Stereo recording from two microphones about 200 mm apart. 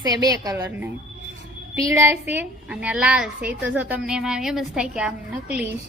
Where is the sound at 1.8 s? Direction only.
15° right (ahead or behind).